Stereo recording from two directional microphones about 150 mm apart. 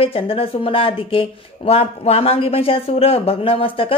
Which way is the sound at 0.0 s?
40° left (ahead or behind).